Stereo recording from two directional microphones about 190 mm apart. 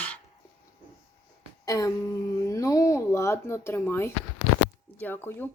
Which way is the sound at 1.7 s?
15° left (ahead or behind).